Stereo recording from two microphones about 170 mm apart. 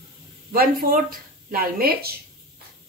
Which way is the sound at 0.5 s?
60° right (ahead or behind).